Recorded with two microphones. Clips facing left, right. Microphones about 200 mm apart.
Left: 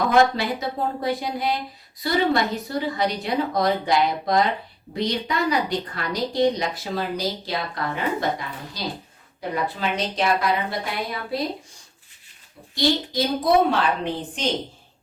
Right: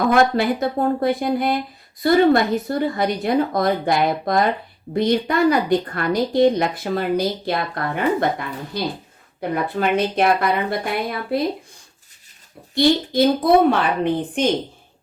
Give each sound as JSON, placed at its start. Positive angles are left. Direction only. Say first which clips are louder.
{"t": 0.1, "sound": "speech", "louder": "right 2 dB", "side_deg": -50}
{"t": 12.7, "sound": "speech", "louder": "right 6 dB", "side_deg": -55}